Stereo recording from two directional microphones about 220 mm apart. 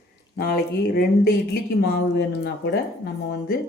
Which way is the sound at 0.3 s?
45° left (ahead or behind).